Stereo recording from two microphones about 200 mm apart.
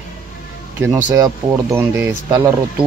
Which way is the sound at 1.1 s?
15° right (ahead or behind).